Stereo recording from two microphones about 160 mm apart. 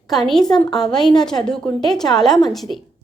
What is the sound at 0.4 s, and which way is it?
Speech, 25° left (ahead or behind).